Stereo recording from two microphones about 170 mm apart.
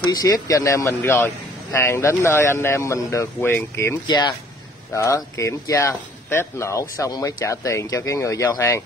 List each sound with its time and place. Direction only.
0.0 s speech: 25° left (ahead or behind)